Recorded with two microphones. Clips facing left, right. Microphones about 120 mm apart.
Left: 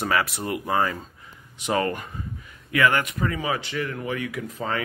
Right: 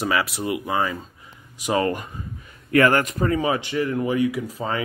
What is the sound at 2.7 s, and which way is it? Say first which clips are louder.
Speech: right 4 dB; 35° right (ahead or behind).